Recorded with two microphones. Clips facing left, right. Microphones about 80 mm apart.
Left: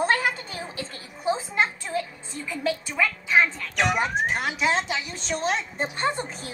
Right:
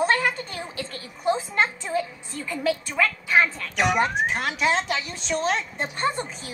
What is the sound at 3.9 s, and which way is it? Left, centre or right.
A woman's voice, centre.